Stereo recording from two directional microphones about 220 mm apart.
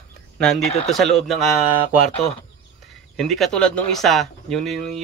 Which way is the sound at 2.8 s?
Centre (ahead or behind).